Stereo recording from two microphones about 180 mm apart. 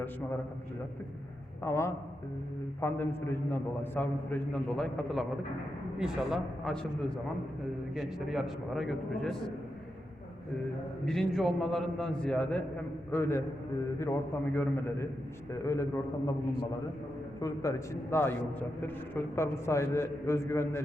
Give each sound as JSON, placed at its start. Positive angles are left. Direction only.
{"t": 1.6, "sound": "a man's voice", "side_deg": 15}
{"t": 7.9, "sound": "a man's voice", "side_deg": 0}
{"t": 11.0, "sound": "a man's voice", "side_deg": 0}
{"t": 17.4, "sound": "a man's voice", "side_deg": 15}